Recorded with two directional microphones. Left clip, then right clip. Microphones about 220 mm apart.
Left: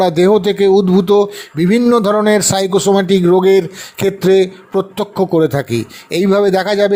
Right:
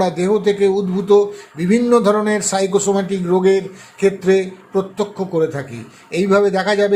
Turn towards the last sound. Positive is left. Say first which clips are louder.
# left 3 dB
turn(degrees=40)  # may be behind; listen again after turning